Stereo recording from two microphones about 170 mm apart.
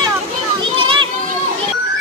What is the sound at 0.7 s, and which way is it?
Children playing, 30° right (ahead or behind).